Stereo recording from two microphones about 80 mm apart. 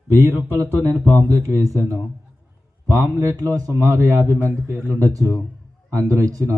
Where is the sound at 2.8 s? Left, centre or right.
Right.